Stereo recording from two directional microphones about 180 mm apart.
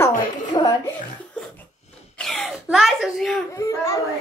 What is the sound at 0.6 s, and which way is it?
Speech, 25° left (ahead or behind).